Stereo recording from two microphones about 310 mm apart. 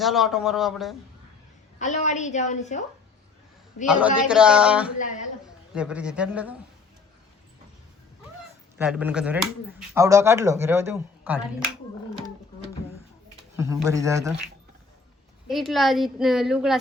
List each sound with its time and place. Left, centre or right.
0.0 s a woman's voice: centre
1.8 s a woman's voice: left
3.8 s a woman's voice: centre
8.8 s a woman's voice: centre
13.6 s speech: centre
15.4 s a woman's voice: centre